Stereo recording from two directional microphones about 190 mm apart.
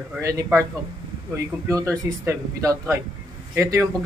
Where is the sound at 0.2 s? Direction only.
15° right (ahead or behind).